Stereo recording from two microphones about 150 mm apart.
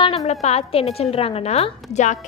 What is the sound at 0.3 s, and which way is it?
A woman's voice, 45° left (ahead or behind).